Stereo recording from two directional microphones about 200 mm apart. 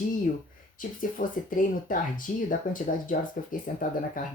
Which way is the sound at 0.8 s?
45° left (ahead or behind).